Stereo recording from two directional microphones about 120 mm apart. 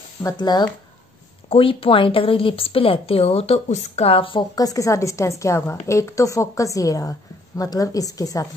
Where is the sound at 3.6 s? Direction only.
65° left (ahead or behind).